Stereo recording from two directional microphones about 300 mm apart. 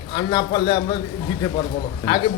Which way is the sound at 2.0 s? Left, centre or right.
Centre.